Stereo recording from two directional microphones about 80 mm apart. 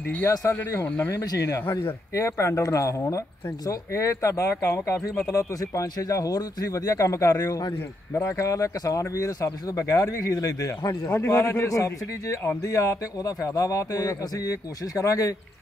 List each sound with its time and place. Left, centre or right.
0.3 s a man's voice: left
8.1 s a man's voice: left